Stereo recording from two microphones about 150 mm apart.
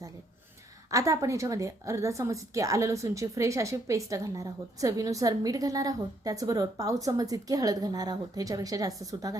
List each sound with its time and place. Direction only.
0.9 s a woman's voice: 20° right (ahead or behind)